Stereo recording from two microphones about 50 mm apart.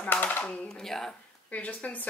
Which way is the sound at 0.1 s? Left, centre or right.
Left.